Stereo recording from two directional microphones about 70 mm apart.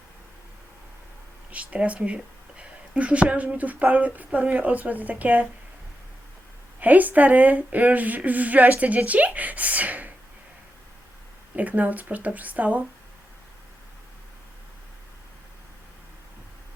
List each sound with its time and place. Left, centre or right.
1.5 s speech: right
6.7 s speech: right
11.5 s speech: right